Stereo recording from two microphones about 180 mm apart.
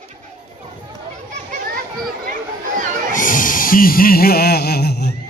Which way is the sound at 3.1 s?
50° left (ahead or behind).